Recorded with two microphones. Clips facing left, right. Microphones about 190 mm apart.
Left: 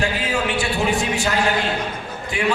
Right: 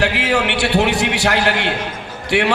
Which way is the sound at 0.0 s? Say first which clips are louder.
Right 4 dB; 75° right (ahead or behind).